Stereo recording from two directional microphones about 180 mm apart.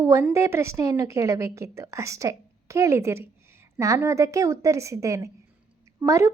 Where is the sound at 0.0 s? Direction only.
15° right (ahead or behind).